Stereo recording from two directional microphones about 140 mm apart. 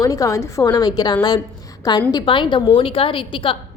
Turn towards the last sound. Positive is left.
turn(degrees=40)  # may be behind; listen again after turning